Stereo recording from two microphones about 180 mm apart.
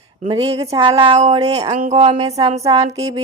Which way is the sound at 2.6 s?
20° right (ahead or behind).